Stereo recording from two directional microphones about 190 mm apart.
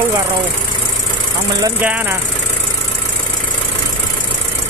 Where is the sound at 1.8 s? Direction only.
10° right (ahead or behind).